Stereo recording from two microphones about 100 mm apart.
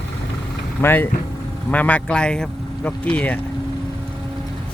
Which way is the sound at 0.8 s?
20° left (ahead or behind).